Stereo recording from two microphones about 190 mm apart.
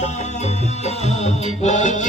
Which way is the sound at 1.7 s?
40° left (ahead or behind).